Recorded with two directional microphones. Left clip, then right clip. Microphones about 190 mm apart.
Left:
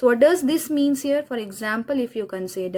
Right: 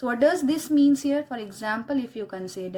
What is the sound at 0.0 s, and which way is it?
Speech, 45° left (ahead or behind).